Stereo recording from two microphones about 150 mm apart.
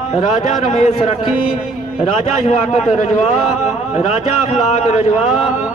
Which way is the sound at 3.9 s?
45° left (ahead or behind).